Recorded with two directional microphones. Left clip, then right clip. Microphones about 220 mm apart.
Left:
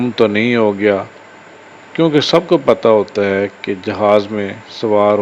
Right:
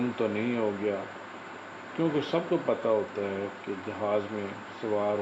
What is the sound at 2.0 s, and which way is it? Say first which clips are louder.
Speech: left 16 dB; 40° left (ahead or behind).